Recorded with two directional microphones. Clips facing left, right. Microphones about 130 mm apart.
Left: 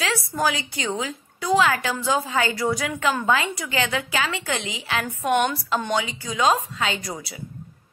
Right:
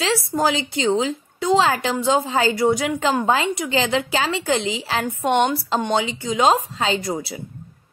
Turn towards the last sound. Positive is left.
turn(degrees=-25)  # may be behind; listen again after turning